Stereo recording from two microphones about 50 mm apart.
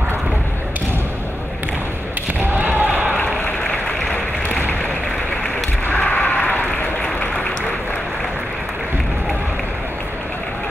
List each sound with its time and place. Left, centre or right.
2.5 s basketball bounce: right
5.9 s applause: left